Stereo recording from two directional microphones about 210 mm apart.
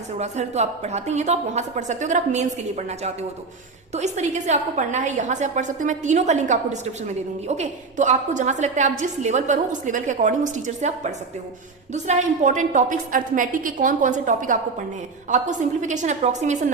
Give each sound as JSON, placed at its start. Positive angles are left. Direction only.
{"t": 0.2, "sound": "a woman's voice", "side_deg": -30}